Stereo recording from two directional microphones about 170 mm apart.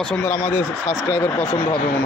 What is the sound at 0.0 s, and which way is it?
A man's voice, 10° left (ahead or behind).